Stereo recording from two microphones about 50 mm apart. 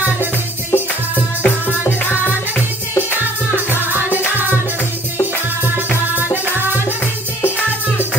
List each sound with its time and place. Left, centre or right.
1.4 s music: left
3.5 s music: right